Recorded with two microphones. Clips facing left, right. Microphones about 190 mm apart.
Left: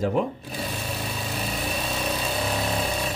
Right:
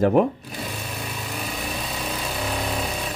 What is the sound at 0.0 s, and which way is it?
Speech, 55° right (ahead or behind).